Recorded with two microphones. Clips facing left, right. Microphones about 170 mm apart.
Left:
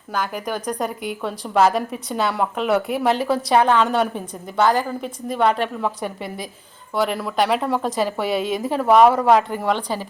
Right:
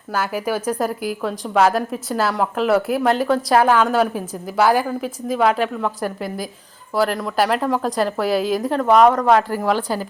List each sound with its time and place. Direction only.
0.1 s a woman's voice: 5° right (ahead or behind)